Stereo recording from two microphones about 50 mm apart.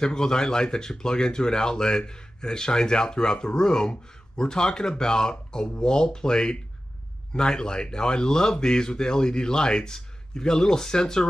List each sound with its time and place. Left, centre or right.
0.0 s speech: centre